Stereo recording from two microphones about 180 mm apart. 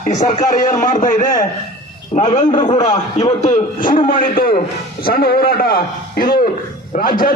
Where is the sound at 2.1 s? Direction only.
40° left (ahead or behind).